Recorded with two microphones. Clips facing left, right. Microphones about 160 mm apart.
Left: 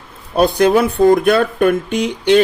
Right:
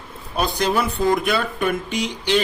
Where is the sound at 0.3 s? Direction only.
55° left (ahead or behind).